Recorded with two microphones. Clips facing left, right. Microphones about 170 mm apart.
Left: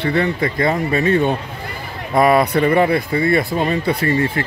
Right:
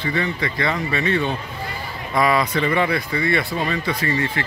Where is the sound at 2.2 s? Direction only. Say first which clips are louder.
Left 6 dB; 55° left (ahead or behind).